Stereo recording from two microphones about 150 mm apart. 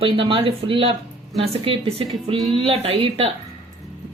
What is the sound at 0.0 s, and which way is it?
Speech, 35° right (ahead or behind).